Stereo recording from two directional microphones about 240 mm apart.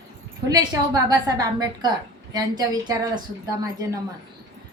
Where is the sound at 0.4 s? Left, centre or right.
Centre.